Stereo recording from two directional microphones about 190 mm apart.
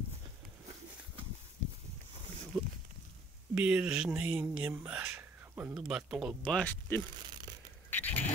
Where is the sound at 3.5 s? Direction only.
5° right (ahead or behind).